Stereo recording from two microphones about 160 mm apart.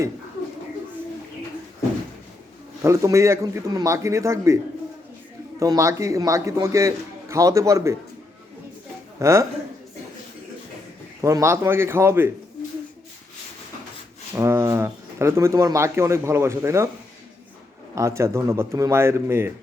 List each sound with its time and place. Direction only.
2.8 s a man's voice: 20° right (ahead or behind)
9.1 s a man's voice: 20° right (ahead or behind)
11.2 s speech: 20° right (ahead or behind)
14.3 s speech: 20° right (ahead or behind)
17.9 s speech: 20° right (ahead or behind)